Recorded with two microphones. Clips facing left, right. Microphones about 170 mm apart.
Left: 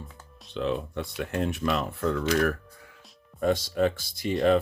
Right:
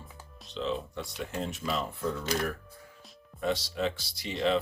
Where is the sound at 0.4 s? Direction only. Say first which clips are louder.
Left 4 dB; 60° left (ahead or behind).